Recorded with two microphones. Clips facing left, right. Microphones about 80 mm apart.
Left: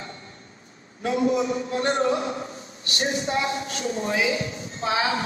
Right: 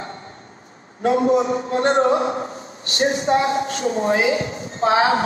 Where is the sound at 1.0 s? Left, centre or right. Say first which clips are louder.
Right 6 dB; right.